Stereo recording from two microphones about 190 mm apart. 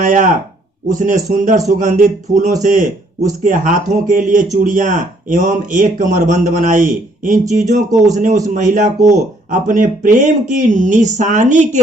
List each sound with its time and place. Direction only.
0.0 s speech: 40° right (ahead or behind)